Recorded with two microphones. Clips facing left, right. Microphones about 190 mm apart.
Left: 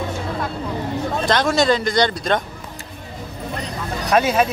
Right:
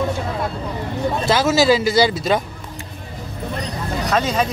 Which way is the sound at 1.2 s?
5° right (ahead or behind).